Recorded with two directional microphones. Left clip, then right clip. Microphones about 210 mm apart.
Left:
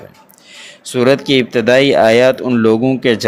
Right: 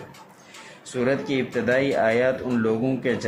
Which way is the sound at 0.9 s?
40° left (ahead or behind).